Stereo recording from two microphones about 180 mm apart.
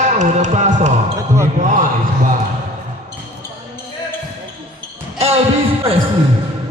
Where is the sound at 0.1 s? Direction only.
40° right (ahead or behind).